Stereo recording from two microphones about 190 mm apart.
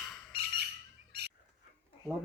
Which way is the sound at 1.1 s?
60° right (ahead or behind).